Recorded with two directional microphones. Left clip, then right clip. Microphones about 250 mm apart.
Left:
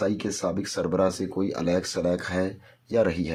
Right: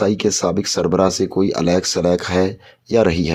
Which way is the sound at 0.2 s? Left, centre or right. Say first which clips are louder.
Right 10 dB; right.